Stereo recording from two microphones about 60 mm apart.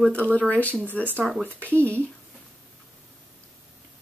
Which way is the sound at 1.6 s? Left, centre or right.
Left.